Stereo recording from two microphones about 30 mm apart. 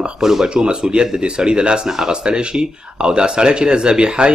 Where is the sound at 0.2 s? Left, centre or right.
Centre.